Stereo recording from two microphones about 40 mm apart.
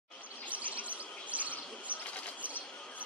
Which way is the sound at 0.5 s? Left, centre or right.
Right.